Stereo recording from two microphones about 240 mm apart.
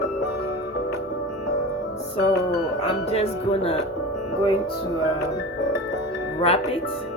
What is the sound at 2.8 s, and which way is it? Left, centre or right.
Speech, left.